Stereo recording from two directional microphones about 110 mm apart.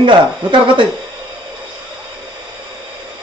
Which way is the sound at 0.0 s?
45° right (ahead or behind).